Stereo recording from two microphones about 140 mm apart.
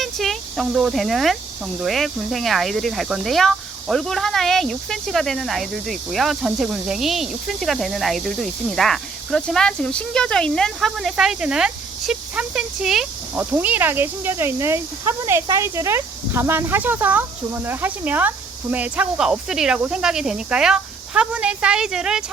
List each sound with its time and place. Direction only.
0.0 s speech: centre (ahead or behind)